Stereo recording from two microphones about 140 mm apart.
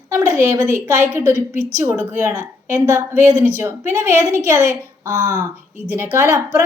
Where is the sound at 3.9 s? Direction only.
20° right (ahead or behind).